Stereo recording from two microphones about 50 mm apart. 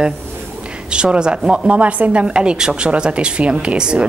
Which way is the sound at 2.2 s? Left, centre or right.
Centre.